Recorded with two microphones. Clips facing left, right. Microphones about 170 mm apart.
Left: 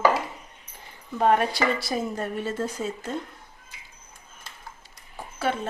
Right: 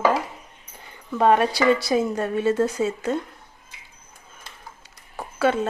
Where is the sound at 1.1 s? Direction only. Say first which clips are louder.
Right 3 dB; 80° right.